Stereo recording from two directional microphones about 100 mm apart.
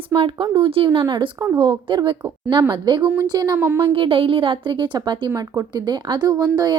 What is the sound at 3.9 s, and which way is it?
A woman's voice, 65° right (ahead or behind).